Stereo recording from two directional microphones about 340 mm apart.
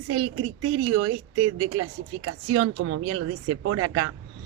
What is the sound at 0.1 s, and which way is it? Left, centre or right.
A woman's voice, right.